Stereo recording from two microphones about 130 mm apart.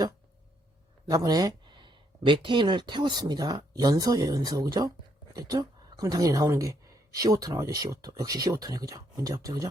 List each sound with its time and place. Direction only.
1.1 s speech: 30° right (ahead or behind)